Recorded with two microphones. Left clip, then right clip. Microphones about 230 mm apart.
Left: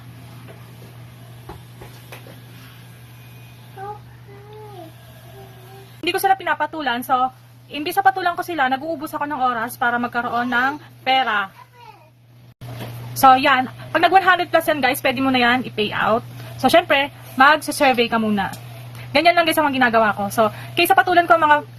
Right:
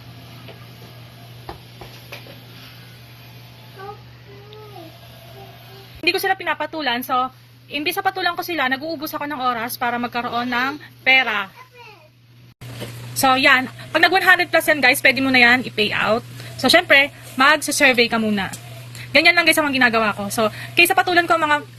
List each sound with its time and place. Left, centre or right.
6.1 s a woman's voice: centre
13.2 s a woman's voice: centre